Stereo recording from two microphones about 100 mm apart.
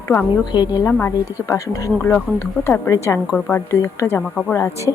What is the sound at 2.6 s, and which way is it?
A woman's voice, 20° left (ahead or behind).